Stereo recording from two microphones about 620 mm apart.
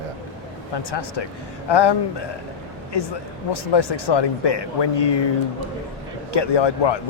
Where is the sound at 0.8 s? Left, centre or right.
Left.